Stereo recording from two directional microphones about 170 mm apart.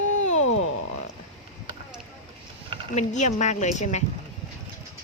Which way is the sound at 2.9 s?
45° left (ahead or behind).